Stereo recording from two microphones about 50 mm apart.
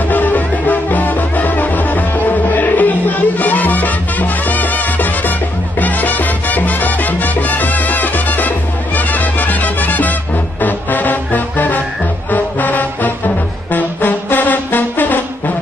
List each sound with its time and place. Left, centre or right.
0.1 s music: left
5.8 s salsa music: left
10.6 s music: left